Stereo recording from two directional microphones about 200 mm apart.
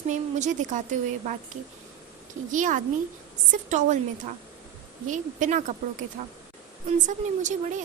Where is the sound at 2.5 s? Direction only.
40° right (ahead or behind).